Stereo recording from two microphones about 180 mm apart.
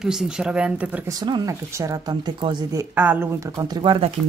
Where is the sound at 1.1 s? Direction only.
20° right (ahead or behind).